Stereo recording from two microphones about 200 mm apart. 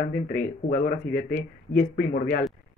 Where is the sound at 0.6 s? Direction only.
45° left (ahead or behind).